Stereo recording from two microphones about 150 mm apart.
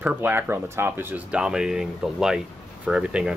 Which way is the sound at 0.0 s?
10° right (ahead or behind).